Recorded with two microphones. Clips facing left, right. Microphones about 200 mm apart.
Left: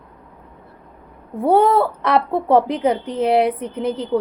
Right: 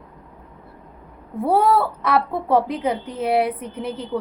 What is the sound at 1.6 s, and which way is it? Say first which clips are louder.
Speech: left 2 dB; 30° left (ahead or behind).